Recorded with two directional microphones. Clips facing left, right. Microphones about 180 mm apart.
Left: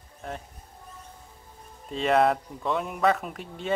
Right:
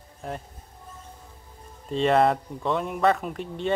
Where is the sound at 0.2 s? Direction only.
Centre (ahead or behind).